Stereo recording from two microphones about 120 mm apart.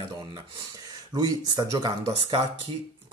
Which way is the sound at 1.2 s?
30° right (ahead or behind).